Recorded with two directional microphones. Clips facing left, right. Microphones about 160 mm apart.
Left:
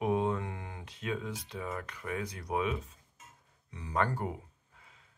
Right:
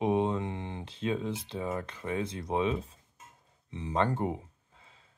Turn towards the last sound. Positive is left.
turn(degrees=-30)  # may be behind; listen again after turning